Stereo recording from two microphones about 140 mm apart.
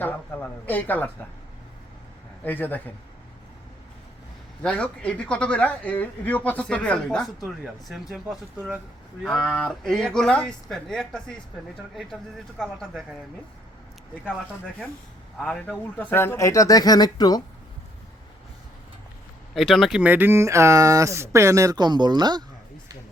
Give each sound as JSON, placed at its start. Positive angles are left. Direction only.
{"t": 0.0, "sound": "speech", "side_deg": 15}
{"t": 2.4, "sound": "speech", "side_deg": 15}
{"t": 4.6, "sound": "speech", "side_deg": 10}
{"t": 12.5, "sound": "speech", "side_deg": 5}
{"t": 15.4, "sound": "speech", "side_deg": 5}
{"t": 19.5, "sound": "speech", "side_deg": 0}